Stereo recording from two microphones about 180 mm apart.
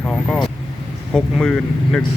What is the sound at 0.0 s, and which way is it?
Vehicle, 5° left (ahead or behind).